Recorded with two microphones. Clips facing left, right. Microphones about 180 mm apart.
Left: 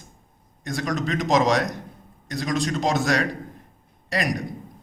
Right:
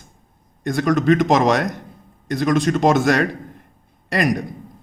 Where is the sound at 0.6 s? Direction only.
55° right (ahead or behind).